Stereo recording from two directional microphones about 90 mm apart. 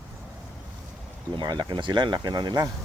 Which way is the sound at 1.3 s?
55° right (ahead or behind).